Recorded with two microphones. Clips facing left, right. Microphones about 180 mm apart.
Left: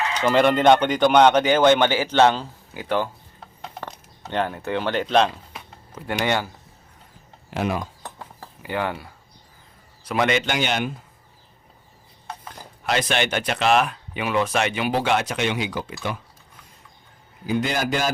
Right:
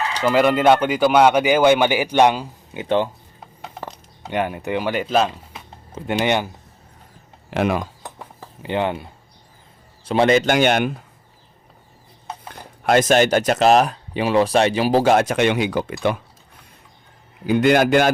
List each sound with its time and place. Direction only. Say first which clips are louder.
0.2 s speech: right 1 dB; 5° right (ahead or behind); by 3.1 s 20° right (ahead or behind)
3.6 s speech: right 2 dB; 5° right (ahead or behind)
5.9 s speech: right 4 dB; 20° right (ahead or behind)
7.5 s speech: right 5 dB; 70° right (ahead or behind)
8.6 s a man's voice: right 4 dB; 20° right (ahead or behind); by 11.0 s 60° right (ahead or behind)
12.5 s speech: right 8 dB; 50° right (ahead or behind)
17.4 s a man's voice: right 8 dB; 65° right (ahead or behind)